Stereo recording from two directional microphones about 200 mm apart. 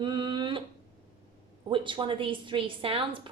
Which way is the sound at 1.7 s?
25° right (ahead or behind).